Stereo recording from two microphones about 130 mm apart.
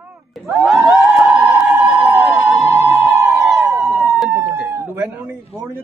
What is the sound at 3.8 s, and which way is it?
Police car, centre (ahead or behind).